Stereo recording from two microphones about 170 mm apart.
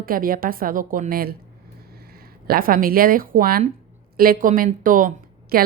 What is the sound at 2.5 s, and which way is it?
A woman's voice, 55° right (ahead or behind).